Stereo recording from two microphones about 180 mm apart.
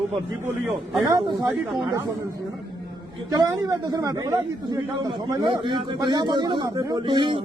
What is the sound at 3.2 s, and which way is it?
A man's voice, 20° right (ahead or behind).